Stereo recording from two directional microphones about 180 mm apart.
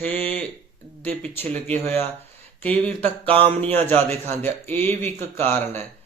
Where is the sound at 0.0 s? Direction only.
10° left (ahead or behind).